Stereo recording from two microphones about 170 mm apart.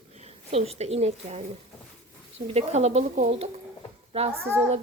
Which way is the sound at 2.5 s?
40° right (ahead or behind).